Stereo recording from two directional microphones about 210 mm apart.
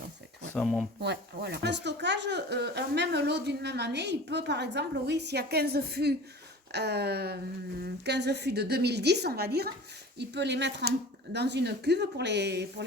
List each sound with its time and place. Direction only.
0.5 s speech: 5° left (ahead or behind)
1.0 s speech: 50° right (ahead or behind)